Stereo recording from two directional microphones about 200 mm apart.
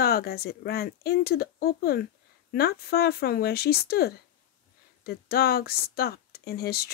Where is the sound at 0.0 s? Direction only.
50° left (ahead or behind).